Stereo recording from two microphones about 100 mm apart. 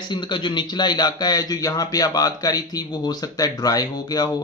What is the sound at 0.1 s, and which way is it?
Speech, 50° left (ahead or behind).